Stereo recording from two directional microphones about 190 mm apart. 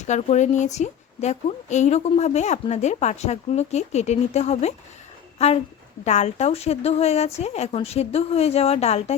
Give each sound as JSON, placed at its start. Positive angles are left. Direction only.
{"t": 0.0, "sound": "a woman's voice", "side_deg": 35}